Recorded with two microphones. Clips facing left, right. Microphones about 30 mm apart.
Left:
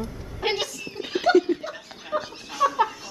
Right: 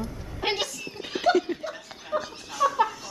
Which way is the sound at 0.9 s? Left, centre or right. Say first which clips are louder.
Left 3 dB; centre.